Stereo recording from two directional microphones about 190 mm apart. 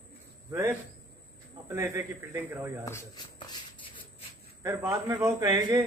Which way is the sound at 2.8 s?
15° left (ahead or behind).